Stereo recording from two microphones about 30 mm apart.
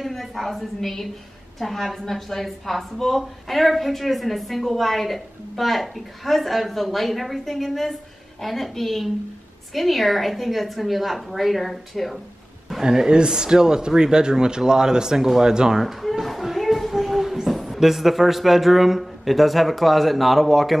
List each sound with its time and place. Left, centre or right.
0.2 s a woman's voice: centre
12.8 s speech: right
15.8 s a woman's voice: centre
16.5 s a sound: centre
17.7 s a woman's voice: centre